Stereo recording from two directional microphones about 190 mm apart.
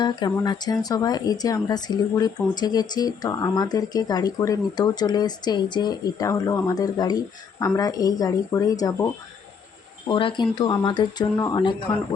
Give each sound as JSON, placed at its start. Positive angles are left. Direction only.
{"t": 0.0, "sound": "speech", "side_deg": 25}
{"t": 10.1, "sound": "speech", "side_deg": 25}